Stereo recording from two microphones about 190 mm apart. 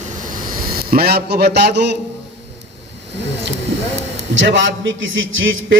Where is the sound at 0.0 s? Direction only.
40° right (ahead or behind); by 2.0 s 65° right (ahead or behind).